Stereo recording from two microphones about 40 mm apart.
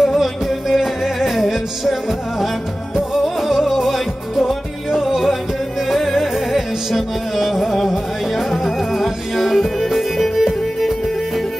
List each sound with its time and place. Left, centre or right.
0.0 s music: centre